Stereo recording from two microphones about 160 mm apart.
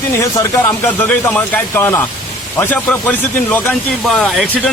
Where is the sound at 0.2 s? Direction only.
15° left (ahead or behind).